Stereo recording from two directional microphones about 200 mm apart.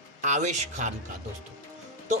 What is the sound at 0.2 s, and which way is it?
Speech, 35° right (ahead or behind).